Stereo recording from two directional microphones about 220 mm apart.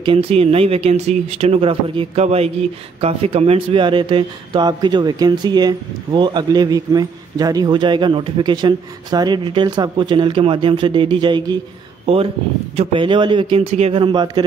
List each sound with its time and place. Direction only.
0.0 s speech: 25° right (ahead or behind)
12.7 s speech: 25° right (ahead or behind)